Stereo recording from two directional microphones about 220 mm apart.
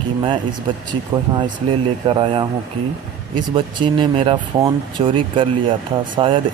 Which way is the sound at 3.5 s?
20° right (ahead or behind).